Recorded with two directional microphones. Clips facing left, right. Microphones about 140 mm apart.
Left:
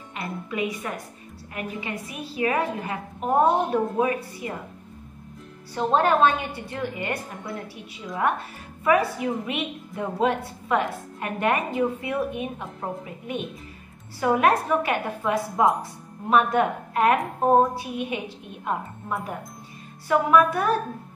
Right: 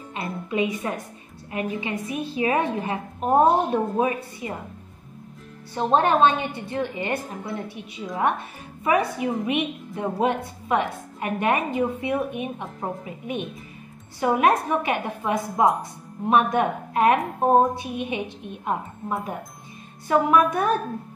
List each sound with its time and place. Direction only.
0.1 s a woman's voice: 25° right (ahead or behind)
5.9 s a woman's voice: 20° right (ahead or behind)
8.8 s a woman's voice: 20° right (ahead or behind)